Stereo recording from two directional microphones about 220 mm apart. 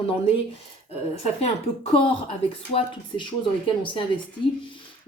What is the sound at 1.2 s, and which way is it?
Speech, 30° left (ahead or behind).